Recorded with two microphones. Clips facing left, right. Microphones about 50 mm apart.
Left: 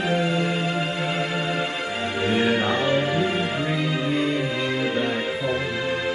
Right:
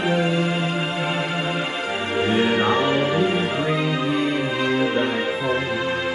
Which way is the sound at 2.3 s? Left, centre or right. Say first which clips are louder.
Right 2 dB; right.